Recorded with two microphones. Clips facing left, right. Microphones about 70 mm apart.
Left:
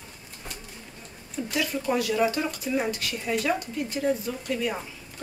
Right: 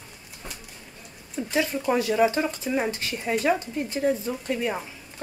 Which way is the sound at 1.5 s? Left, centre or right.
Right.